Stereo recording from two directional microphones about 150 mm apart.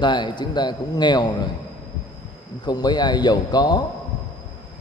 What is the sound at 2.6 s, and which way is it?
A man's voice, 25° left (ahead or behind).